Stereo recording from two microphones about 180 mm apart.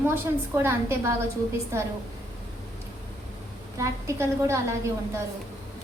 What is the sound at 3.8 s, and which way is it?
Speech, 15° right (ahead or behind).